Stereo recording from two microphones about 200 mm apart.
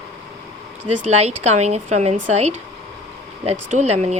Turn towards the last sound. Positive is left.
turn(degrees=-35)  # may be behind; listen again after turning